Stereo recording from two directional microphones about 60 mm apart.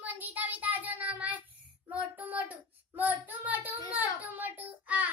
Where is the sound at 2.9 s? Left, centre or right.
Right.